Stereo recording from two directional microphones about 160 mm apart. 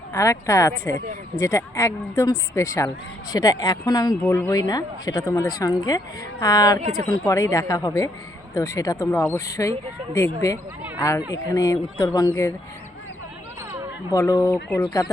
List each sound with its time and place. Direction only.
0.1 s speech: 20° left (ahead or behind)
4.2 s speech: 15° left (ahead or behind)
6.8 s speech: 60° right (ahead or behind)
7.3 s speech: 20° left (ahead or behind)
10.9 s speech: 20° left (ahead or behind)
14.1 s speech: 20° left (ahead or behind)